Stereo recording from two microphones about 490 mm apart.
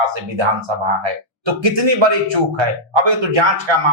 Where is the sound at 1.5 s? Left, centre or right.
Right.